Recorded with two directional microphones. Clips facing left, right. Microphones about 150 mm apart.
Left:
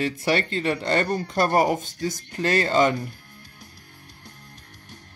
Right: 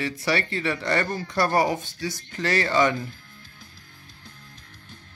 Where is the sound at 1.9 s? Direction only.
45° left (ahead or behind).